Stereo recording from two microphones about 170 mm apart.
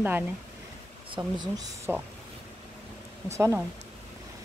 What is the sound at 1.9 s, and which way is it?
Speech, 10° right (ahead or behind).